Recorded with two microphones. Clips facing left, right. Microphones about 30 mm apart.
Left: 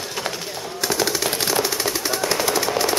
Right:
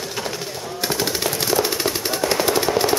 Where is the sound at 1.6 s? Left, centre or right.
Centre.